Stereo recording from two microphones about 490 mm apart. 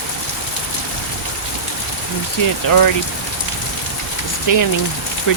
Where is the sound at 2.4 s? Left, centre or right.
Left.